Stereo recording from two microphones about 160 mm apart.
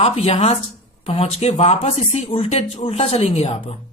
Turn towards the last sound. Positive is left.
turn(degrees=40)  # may be behind; listen again after turning